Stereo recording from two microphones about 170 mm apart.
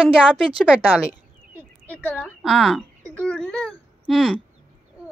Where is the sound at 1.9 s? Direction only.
10° left (ahead or behind).